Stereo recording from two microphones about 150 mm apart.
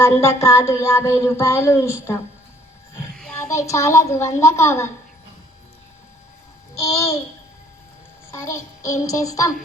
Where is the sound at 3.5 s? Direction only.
20° left (ahead or behind).